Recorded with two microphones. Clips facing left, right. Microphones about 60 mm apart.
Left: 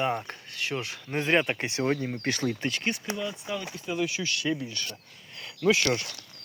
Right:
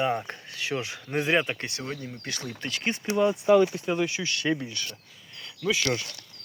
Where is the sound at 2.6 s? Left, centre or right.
Centre.